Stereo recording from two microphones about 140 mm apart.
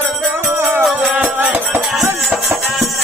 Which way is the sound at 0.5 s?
15° right (ahead or behind).